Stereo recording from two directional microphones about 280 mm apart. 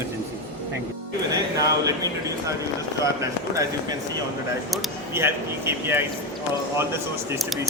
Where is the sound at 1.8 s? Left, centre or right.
Centre.